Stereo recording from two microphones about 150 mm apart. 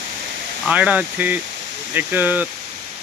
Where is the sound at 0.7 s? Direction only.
10° right (ahead or behind).